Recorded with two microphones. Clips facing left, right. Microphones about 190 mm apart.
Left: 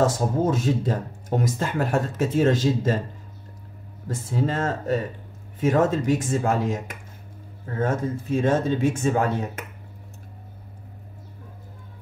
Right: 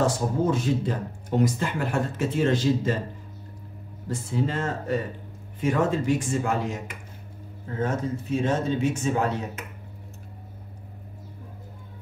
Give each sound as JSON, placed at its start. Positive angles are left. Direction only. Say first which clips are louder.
{"t": 0.0, "sound": "speech", "louder": "left 2 dB", "side_deg": 45}
{"t": 4.1, "sound": "speech", "louder": "left 2 dB", "side_deg": 45}